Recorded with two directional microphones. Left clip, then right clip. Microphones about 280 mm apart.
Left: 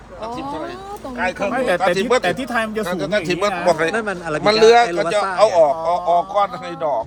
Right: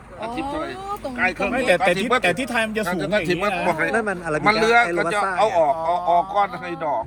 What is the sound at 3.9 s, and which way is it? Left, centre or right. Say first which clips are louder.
Speech: even; centre.